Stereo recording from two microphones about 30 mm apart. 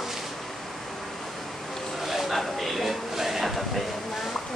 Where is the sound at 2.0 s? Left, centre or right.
Centre.